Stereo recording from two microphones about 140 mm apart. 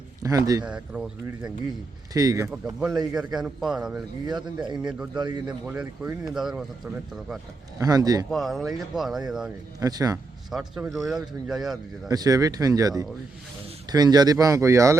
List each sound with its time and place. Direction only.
0.2 s speech: 25° right (ahead or behind)
0.6 s speech: 5° right (ahead or behind)
2.1 s speech: 25° right (ahead or behind)
3.3 s speech: 5° right (ahead or behind)
4.3 s a man's voice: 30° right (ahead or behind)
5.7 s speech: 10° right (ahead or behind)
7.8 s speech: 25° right (ahead or behind)
8.3 s speech: centre (ahead or behind)
9.8 s speech: 25° right (ahead or behind)
10.5 s speech: 5° right (ahead or behind)
12.0 s speech: 25° right (ahead or behind)